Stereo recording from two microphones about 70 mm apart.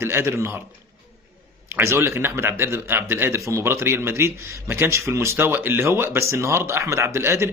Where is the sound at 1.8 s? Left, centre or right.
Right.